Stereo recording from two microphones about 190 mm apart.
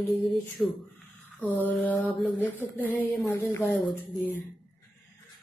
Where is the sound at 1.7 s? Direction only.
10° left (ahead or behind).